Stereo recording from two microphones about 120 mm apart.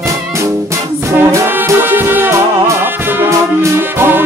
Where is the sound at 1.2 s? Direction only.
20° right (ahead or behind).